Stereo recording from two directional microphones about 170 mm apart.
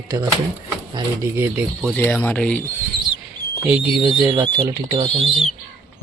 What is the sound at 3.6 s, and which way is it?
Speech, 10° right (ahead or behind).